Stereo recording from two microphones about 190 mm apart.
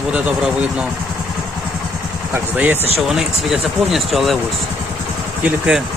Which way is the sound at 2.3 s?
10° right (ahead or behind).